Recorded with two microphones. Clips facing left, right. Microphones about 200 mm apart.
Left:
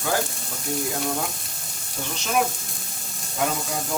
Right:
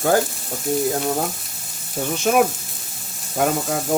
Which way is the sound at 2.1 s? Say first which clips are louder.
Right 7 dB; 50° right (ahead or behind).